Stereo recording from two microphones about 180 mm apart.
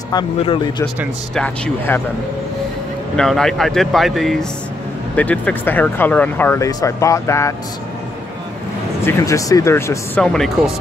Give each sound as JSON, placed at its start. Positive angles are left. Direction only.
{"t": 0.1, "sound": "speech", "side_deg": 25}
{"t": 1.3, "sound": "speech", "side_deg": 5}
{"t": 3.2, "sound": "speech", "side_deg": 0}
{"t": 9.0, "sound": "speech", "side_deg": 20}